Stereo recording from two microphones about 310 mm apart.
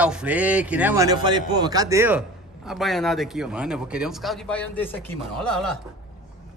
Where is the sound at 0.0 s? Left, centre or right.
Centre.